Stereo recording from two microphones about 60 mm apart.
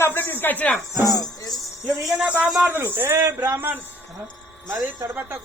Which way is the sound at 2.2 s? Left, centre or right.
Right.